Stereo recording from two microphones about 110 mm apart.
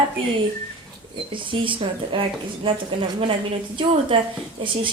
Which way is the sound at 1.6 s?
50° right (ahead or behind).